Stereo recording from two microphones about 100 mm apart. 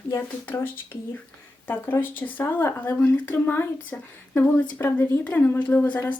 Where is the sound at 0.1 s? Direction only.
25° left (ahead or behind).